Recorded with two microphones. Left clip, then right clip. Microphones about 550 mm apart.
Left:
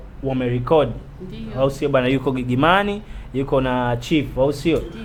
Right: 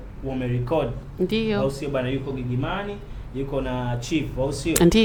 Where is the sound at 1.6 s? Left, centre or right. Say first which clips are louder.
Left 7 dB; left.